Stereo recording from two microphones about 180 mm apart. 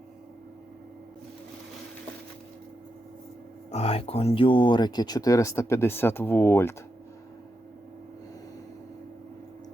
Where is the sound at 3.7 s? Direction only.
35° left (ahead or behind); by 6.8 s 15° left (ahead or behind).